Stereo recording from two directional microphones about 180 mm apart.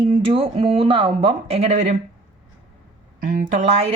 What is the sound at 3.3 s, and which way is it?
Speech, 45° right (ahead or behind).